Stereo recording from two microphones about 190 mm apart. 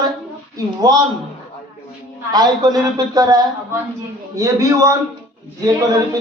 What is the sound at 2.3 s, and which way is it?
A man's voice, 20° right (ahead or behind).